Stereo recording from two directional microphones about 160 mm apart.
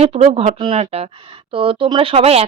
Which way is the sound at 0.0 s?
40° right (ahead or behind).